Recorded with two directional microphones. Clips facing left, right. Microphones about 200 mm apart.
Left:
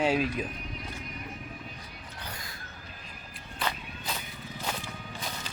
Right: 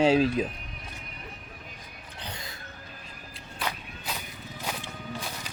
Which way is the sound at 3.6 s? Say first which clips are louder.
Even; 5° right (ahead or behind).